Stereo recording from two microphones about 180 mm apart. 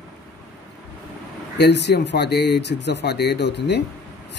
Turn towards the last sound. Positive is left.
turn(degrees=70)  # may be behind; listen again after turning